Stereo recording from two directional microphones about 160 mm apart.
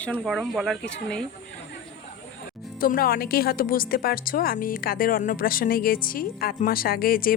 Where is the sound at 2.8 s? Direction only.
65° left (ahead or behind).